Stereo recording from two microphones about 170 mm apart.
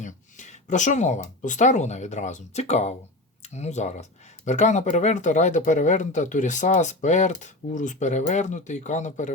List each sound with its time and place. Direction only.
0.0 s speech: 45° left (ahead or behind)